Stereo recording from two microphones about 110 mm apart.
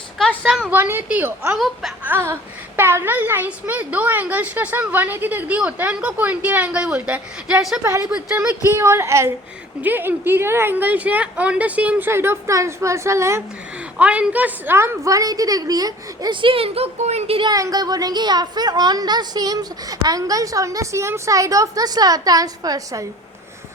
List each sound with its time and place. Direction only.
0.4 s speech: 5° right (ahead or behind)
0.7 s a child's voice: 20° right (ahead or behind)
1.5 s speech: centre (ahead or behind)
2.0 s a child's voice: 20° right (ahead or behind)
7.9 s a woman's voice: 30° right (ahead or behind)
14.0 s speech: 10° right (ahead or behind); by 17.4 s 70° right (ahead or behind)
17.4 s speech: 35° right (ahead or behind)